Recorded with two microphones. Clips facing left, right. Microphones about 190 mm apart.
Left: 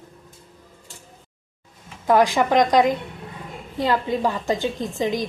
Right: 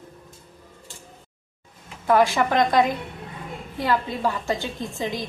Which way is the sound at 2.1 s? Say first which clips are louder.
Left 2 dB; 15° left (ahead or behind).